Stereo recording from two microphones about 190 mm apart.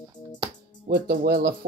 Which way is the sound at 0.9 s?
55° right (ahead or behind).